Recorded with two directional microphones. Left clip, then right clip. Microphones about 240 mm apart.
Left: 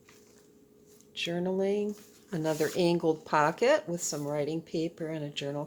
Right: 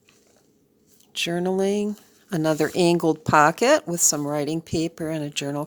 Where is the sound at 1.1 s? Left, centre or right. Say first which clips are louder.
Right 8 dB; right.